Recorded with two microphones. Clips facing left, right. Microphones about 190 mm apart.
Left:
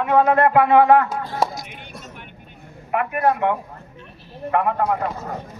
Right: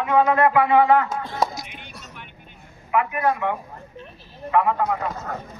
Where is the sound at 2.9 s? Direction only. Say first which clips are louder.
Left 2 dB; 55° left (ahead or behind).